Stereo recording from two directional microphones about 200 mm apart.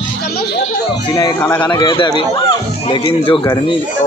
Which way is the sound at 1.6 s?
20° left (ahead or behind).